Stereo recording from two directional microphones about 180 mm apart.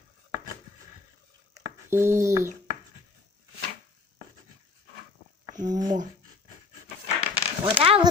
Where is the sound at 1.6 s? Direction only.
15° right (ahead or behind).